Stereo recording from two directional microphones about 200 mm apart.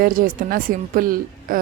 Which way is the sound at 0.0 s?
45° right (ahead or behind).